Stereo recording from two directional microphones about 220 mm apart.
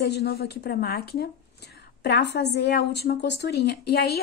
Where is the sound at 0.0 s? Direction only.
50° left (ahead or behind).